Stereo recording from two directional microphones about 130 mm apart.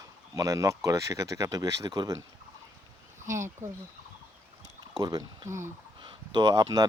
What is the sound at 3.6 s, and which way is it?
Speech, 80° right.